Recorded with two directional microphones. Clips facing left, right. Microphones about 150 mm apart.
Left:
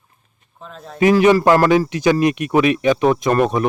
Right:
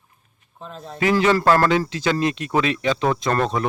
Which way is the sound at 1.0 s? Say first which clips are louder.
Left 6 dB; 20° left (ahead or behind).